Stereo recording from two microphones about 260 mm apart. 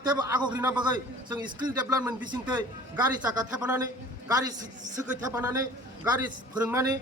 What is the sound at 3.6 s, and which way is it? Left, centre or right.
Speech, centre.